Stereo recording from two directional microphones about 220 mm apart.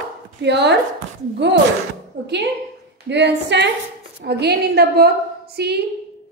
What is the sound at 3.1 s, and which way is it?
A woman's voice, 50° right (ahead or behind).